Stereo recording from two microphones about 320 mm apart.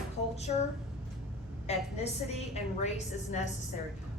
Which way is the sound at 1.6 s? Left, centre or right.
Centre.